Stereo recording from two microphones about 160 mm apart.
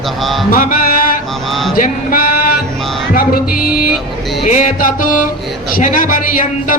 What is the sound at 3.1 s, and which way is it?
Music, 65° left (ahead or behind).